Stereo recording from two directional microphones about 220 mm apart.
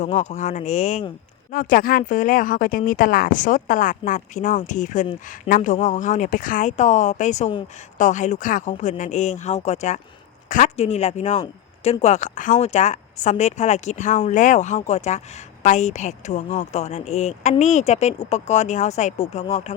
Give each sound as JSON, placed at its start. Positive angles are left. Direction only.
{"t": 0.0, "sound": "speech", "side_deg": 30}